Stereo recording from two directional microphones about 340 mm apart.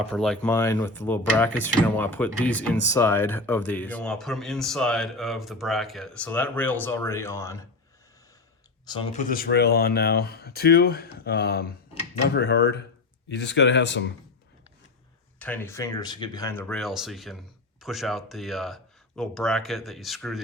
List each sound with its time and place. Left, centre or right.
0.1 s speech: centre
8.9 s speech: centre
15.4 s speech: centre